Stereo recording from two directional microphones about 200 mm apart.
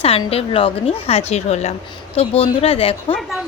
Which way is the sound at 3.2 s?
Centre (ahead or behind).